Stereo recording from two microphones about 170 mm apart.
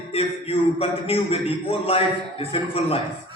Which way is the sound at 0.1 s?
35° left (ahead or behind).